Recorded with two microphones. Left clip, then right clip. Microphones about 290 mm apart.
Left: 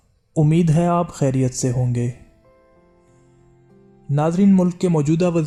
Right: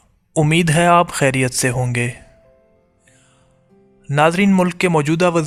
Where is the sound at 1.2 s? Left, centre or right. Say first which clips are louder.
Right 5 dB; right.